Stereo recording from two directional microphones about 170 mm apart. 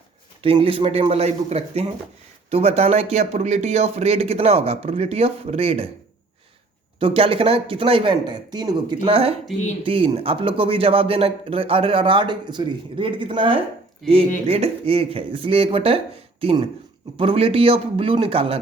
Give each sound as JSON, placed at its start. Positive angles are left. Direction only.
{"t": 0.4, "sound": "a man's voice", "side_deg": -30}
{"t": 7.0, "sound": "a man's voice", "side_deg": -30}
{"t": 14.0, "sound": "speech", "side_deg": 0}
{"t": 14.4, "sound": "a man's voice", "side_deg": -35}